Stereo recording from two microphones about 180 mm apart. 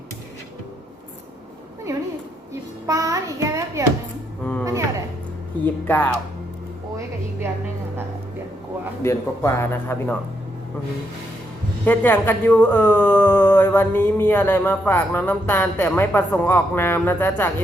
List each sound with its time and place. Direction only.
2.5 s child singing: 20° right (ahead or behind)
4.6 s a sound: 20° right (ahead or behind)
5.6 s speech: 10° left (ahead or behind)
6.9 s music: 15° right (ahead or behind)
9.0 s speech: 15° left (ahead or behind)
11.9 s speech: 10° left (ahead or behind)